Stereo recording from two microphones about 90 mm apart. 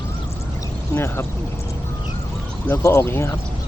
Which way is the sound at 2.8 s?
35° left (ahead or behind).